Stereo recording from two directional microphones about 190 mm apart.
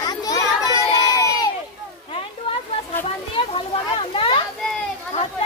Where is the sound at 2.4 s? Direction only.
30° left (ahead or behind).